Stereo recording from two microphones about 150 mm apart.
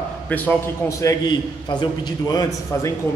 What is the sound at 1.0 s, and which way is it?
A man's voice, 25° left (ahead or behind).